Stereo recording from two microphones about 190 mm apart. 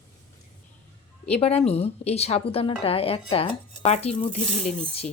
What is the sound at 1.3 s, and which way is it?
A woman's voice, 30° left (ahead or behind).